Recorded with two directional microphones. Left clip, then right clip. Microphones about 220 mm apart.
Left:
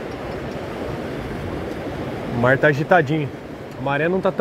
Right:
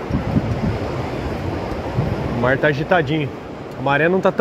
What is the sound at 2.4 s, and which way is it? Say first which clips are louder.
Speech: left 1 dB; 15° left (ahead or behind).